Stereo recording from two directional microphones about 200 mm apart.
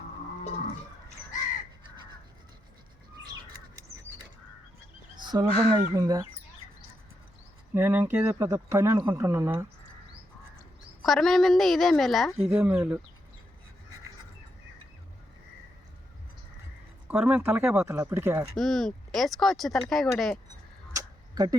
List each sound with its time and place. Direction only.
5.1 s speech: 20° right (ahead or behind)
7.7 s speech: 10° right (ahead or behind)
11.0 s a woman's voice: centre (ahead or behind)
12.4 s speech: 10° right (ahead or behind)
17.1 s speech: 5° right (ahead or behind)
18.5 s a woman's voice: centre (ahead or behind)
20.9 s a sound: 20° right (ahead or behind)